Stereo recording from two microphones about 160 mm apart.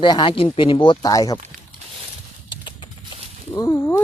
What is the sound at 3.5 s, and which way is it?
Speech, 20° left (ahead or behind).